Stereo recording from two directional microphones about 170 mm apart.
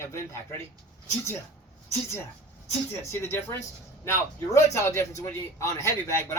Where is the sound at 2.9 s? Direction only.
15° left (ahead or behind).